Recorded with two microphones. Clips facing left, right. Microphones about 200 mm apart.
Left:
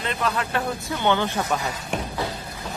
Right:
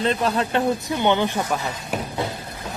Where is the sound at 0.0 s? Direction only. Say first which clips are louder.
Right 5 dB; 30° right (ahead or behind); by 1.5 s 15° right (ahead or behind).